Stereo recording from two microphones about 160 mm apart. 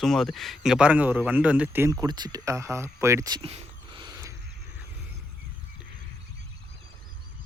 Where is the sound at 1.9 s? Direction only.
25° right (ahead or behind).